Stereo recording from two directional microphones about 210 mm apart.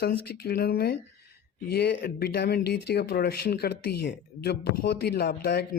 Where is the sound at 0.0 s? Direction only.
50° left (ahead or behind).